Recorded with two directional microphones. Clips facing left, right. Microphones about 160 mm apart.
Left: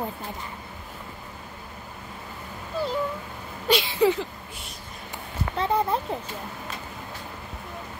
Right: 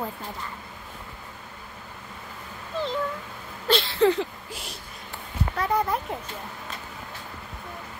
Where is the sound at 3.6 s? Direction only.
15° left (ahead or behind).